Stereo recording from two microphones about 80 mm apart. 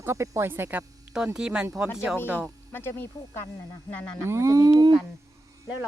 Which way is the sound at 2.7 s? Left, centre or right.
Left.